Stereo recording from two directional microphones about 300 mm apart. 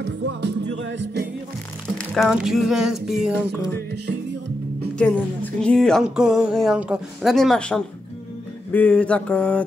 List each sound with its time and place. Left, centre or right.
0.0 s music: right
2.0 s speech: centre
3.4 s music: right
4.9 s speech: centre